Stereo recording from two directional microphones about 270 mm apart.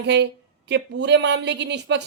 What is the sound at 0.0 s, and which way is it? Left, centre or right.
Speech, right.